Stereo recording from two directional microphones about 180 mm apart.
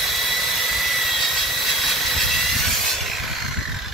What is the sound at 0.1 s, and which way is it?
Jet engine, centre (ahead or behind).